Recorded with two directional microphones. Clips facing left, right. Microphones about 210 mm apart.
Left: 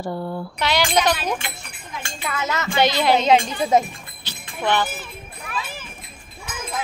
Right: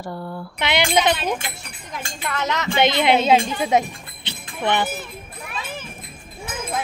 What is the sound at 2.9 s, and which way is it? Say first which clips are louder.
Speech: right 1 dB; 20° right (ahead or behind).